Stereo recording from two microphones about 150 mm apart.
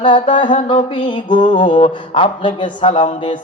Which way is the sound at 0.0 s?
35° left (ahead or behind).